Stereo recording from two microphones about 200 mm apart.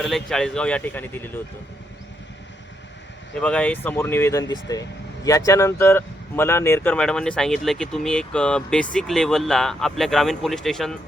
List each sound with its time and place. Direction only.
0.0 s speech: centre (ahead or behind)
3.4 s speech: 5° left (ahead or behind)